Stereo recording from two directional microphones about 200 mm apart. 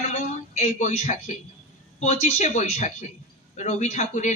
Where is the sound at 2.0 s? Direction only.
35° left (ahead or behind).